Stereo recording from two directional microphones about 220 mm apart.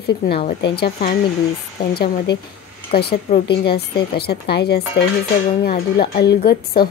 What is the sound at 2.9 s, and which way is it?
A woman's voice, 45° left (ahead or behind).